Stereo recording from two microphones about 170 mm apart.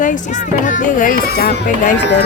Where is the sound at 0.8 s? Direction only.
50° left (ahead or behind).